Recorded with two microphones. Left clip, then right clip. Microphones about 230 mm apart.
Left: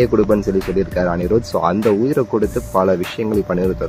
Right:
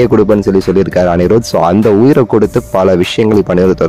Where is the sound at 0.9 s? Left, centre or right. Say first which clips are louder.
Right 8 dB; right.